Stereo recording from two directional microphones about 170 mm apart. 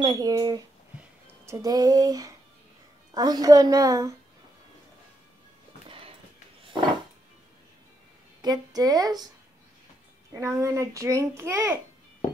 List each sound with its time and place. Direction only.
0.0 s a woman's voice: 20° right (ahead or behind)
5.9 s a sound: 30° right (ahead or behind)
8.4 s a woman's voice: 25° right (ahead or behind)
10.3 s a child's voice: 20° right (ahead or behind)